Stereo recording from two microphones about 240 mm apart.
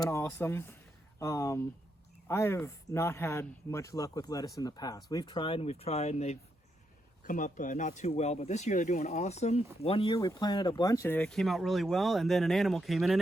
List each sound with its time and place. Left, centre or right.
0.0 s speech: centre